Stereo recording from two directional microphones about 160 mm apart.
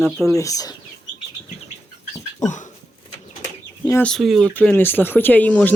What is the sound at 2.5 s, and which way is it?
Dog, 50° left (ahead or behind).